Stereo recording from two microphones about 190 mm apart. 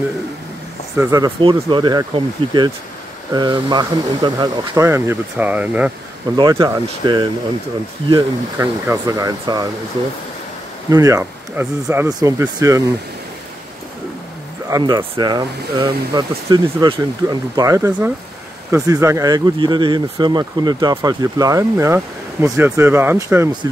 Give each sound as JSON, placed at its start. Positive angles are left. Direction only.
{"t": 0.9, "sound": "speech", "side_deg": -15}
{"t": 6.3, "sound": "speech", "side_deg": -20}
{"t": 10.9, "sound": "speech", "side_deg": -20}
{"t": 14.7, "sound": "speech", "side_deg": -20}